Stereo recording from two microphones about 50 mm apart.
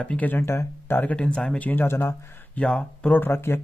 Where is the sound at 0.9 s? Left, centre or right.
Left.